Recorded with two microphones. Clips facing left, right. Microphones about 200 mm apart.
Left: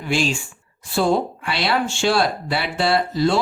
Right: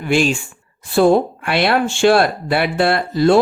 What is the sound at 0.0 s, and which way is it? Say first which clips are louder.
Speech: right 5 dB; 55° right (ahead or behind).